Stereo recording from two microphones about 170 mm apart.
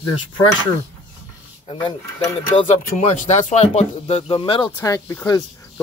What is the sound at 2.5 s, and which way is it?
Speech, 45° left (ahead or behind).